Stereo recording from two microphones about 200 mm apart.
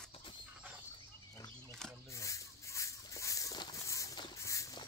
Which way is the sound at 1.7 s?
5° left (ahead or behind).